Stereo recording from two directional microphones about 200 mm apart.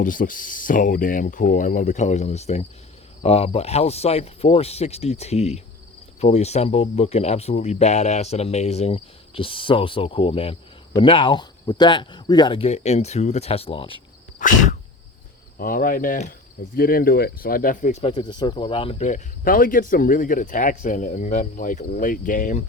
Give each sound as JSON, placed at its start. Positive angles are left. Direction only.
{"t": 0.0, "sound": "speech", "side_deg": 40}
{"t": 14.3, "sound": "a sound", "side_deg": 40}
{"t": 15.5, "sound": "speech", "side_deg": 45}
{"t": 18.1, "sound": "speech", "side_deg": 20}